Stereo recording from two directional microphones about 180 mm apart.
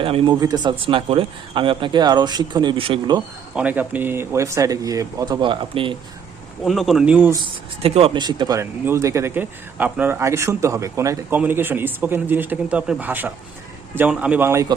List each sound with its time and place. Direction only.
0.0 s speech: 30° right (ahead or behind)
3.5 s speech: 10° right (ahead or behind); by 6.0 s 30° right (ahead or behind)
6.7 s speech: centre (ahead or behind)
7.4 s speech: 30° right (ahead or behind); by 14.7 s 15° right (ahead or behind)